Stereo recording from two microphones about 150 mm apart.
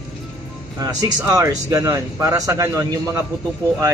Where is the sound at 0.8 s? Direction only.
25° right (ahead or behind).